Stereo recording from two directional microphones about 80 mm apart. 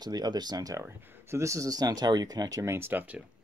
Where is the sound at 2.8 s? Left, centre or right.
Right.